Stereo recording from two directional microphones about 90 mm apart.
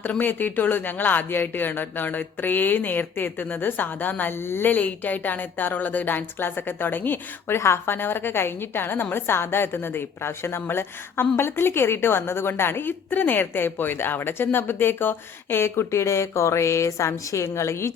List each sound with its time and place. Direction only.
0.0 s speech: 20° left (ahead or behind)